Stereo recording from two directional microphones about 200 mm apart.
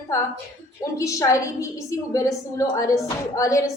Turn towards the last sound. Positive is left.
turn(degrees=15)  # may be behind; listen again after turning